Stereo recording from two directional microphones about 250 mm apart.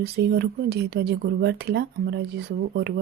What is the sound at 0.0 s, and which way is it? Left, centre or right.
Speech, right.